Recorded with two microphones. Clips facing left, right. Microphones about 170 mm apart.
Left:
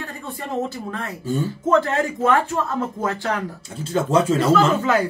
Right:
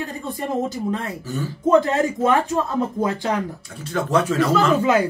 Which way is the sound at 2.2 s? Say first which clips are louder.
Left 2 dB; 15° right (ahead or behind).